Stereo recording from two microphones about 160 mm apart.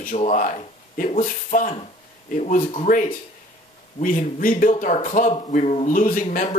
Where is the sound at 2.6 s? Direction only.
40° left (ahead or behind).